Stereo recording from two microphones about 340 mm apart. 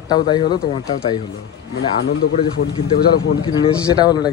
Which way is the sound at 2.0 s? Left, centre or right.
Left.